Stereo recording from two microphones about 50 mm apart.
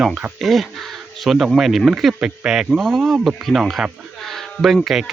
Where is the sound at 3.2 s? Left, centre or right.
Centre.